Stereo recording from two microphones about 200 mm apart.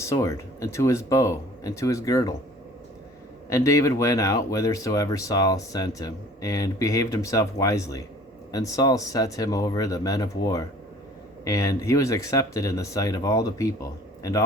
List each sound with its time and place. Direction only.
0.0 s speech: 15° left (ahead or behind)
3.5 s speech: 15° left (ahead or behind)